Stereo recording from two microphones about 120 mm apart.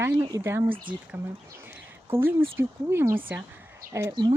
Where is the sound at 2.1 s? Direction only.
20° right (ahead or behind).